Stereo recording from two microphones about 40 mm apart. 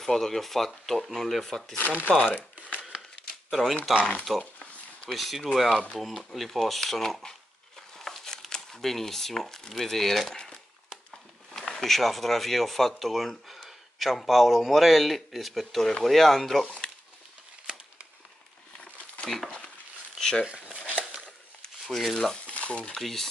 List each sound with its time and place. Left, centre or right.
0.0 s speech: centre
1.9 s speech: right
3.3 s crumpling: centre
4.3 s speech: centre
8.0 s crumpling: centre
8.5 s speech: centre
10.3 s crumpling: centre
11.6 s speech: centre
19.2 s speech: centre
20.2 s a sound: centre
21.8 s speech: centre
22.5 s frying: left
22.9 s speech: centre